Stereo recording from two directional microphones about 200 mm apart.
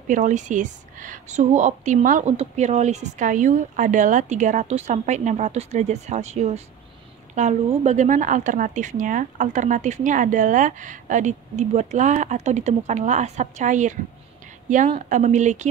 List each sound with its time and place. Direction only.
0.1 s a woman's voice: 35° right (ahead or behind)